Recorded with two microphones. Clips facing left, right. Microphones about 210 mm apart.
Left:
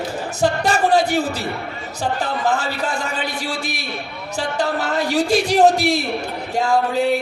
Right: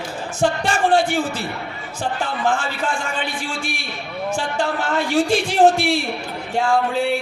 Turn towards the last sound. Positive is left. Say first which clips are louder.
# left 1 dB
turn(degrees=40)  # may be behind; listen again after turning